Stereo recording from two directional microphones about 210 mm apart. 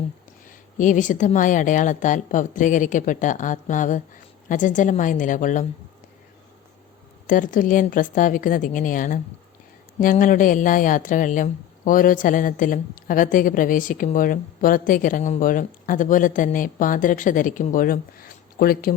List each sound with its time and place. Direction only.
0.4 s speech: 35° left (ahead or behind)
7.3 s speech: 40° left (ahead or behind)